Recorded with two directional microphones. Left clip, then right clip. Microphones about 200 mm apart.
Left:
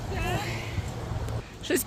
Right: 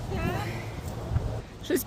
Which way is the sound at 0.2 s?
55° right (ahead or behind).